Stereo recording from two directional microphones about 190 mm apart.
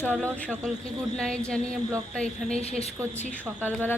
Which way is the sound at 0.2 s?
5° left (ahead or behind).